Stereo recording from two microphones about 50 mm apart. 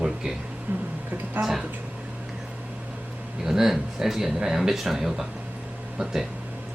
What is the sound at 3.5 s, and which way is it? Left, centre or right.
Speech, centre.